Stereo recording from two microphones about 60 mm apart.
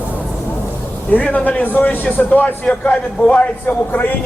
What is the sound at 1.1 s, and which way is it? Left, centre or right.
A man's voice, left.